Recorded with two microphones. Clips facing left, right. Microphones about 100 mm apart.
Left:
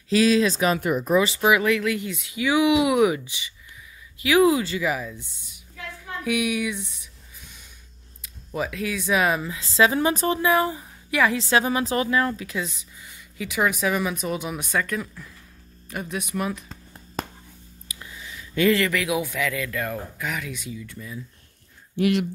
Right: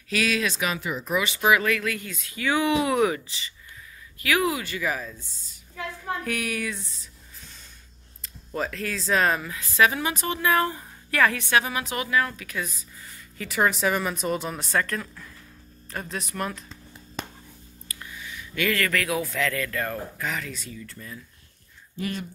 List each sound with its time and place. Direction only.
0.1 s speech: 30° left (ahead or behind)
1.4 s a woman's voice: 20° left (ahead or behind)
4.2 s a woman's voice: 25° left (ahead or behind)
8.2 s speech: 10° left (ahead or behind)
9.4 s speech: 25° left (ahead or behind)
10.4 s a woman's voice: 15° left (ahead or behind)
11.3 s a woman's voice: 25° left (ahead or behind); by 16.6 s 10° left (ahead or behind)
16.6 s a sound: 45° left (ahead or behind)
17.8 s a sound: 20° left (ahead or behind)
18.9 s a woman's voice: 15° left (ahead or behind)
21.9 s speech: 75° left (ahead or behind)